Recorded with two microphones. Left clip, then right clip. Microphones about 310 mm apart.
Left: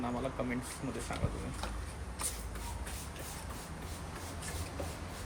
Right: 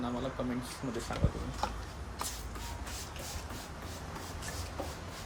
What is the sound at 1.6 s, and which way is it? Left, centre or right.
Speech, right.